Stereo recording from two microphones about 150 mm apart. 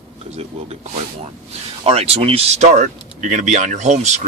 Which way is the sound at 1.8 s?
40° right (ahead or behind).